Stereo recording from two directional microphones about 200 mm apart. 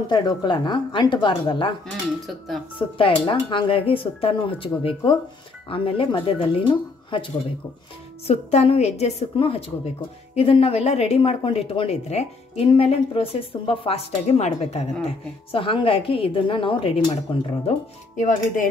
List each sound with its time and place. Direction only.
0.1 s a woman's voice: 20° left (ahead or behind)
1.9 s speech: centre (ahead or behind)
3.0 s a woman's voice: 25° left (ahead or behind)
8.3 s a woman's voice: 30° left (ahead or behind)